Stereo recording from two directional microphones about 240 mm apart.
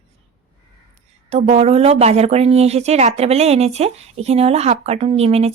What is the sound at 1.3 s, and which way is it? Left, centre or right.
A woman's voice, right.